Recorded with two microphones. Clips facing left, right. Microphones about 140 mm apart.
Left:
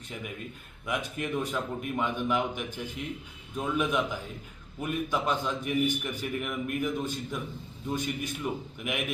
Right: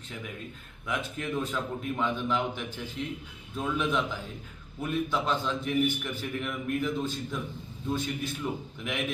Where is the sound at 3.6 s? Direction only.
10° left (ahead or behind).